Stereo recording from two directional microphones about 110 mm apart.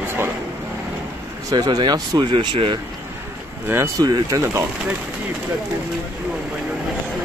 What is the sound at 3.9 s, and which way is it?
Speech, 35° right (ahead or behind).